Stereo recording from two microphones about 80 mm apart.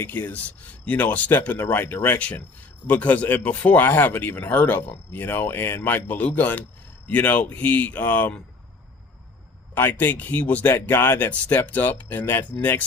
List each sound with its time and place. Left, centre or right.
0.0 s speech: left
9.7 s speech: left